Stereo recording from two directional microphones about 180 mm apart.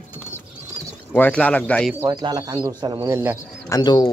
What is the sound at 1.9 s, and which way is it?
Speech, 20° right (ahead or behind).